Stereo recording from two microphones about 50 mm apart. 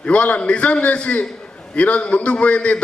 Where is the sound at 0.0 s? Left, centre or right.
Left.